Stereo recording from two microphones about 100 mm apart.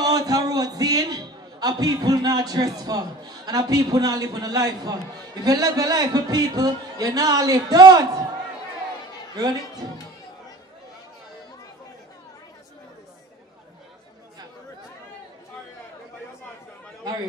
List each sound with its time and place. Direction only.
0.0 s a man's voice: 40° right (ahead or behind)
9.3 s a man's voice: 40° right (ahead or behind)